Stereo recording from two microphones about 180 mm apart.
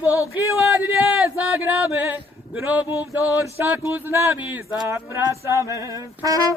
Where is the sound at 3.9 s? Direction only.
10° right (ahead or behind).